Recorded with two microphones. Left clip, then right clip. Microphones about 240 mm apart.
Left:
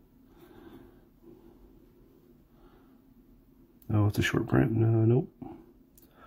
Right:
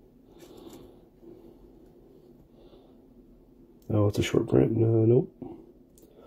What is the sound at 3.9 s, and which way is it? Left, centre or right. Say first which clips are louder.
Speech: right 4 dB; left.